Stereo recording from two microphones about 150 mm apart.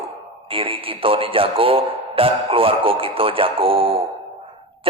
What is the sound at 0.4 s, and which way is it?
Speech, 35° right (ahead or behind).